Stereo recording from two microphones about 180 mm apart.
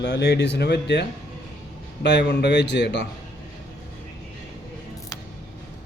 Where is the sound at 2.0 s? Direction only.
70° left (ahead or behind).